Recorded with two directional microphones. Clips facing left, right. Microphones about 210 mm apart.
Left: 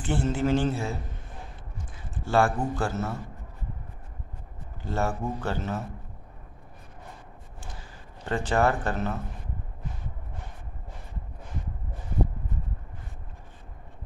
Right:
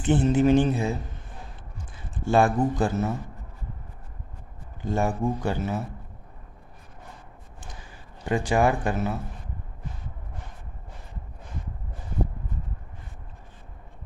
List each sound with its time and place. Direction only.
0.0 s speech: 20° right (ahead or behind)
2.2 s speech: 15° right (ahead or behind)
4.8 s speech: 15° right (ahead or behind)
8.3 s speech: 10° right (ahead or behind)